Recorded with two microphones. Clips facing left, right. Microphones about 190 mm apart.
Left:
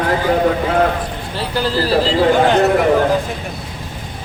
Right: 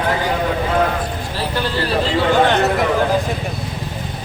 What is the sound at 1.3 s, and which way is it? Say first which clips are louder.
Speech: left 4 dB; 30° left (ahead or behind).